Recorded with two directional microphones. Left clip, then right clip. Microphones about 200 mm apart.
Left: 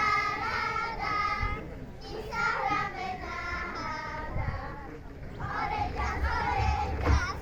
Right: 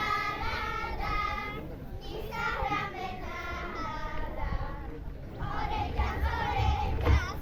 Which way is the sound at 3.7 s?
5° right (ahead or behind).